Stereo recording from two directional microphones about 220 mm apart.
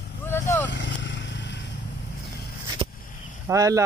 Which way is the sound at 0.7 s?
55° left (ahead or behind).